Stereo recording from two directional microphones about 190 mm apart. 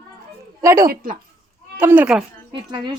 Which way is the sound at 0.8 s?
45° right (ahead or behind).